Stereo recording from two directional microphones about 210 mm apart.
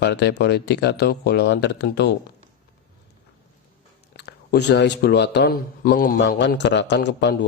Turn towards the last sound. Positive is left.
turn(degrees=55)  # may be behind; listen again after turning